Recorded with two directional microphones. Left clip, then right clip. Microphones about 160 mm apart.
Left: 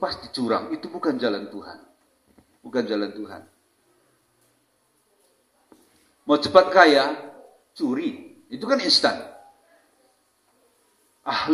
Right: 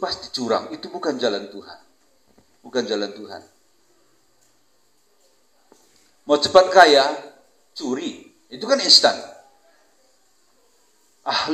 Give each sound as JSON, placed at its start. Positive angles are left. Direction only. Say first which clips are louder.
{"t": 0.0, "sound": "speech", "louder": "right 1 dB", "side_deg": -15}
{"t": 6.2, "sound": "speech", "louder": "right 2 dB", "side_deg": -15}
{"t": 11.2, "sound": "speech", "louder": "right 2 dB", "side_deg": -15}